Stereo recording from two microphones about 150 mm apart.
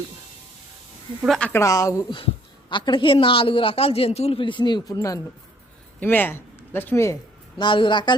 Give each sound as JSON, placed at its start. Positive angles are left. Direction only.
{"t": 1.2, "sound": "speech", "side_deg": 5}
{"t": 1.6, "sound": "speech", "side_deg": 20}
{"t": 2.1, "sound": "a woman's voice", "side_deg": 35}
{"t": 6.0, "sound": "speech", "side_deg": 15}
{"t": 7.6, "sound": "a woman's voice", "side_deg": 35}